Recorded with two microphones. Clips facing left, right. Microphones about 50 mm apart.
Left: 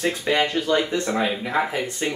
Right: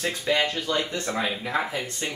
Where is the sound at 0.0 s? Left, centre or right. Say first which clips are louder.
Left 3 dB; centre.